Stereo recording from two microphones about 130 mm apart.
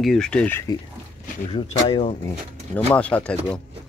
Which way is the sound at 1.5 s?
40° left (ahead or behind).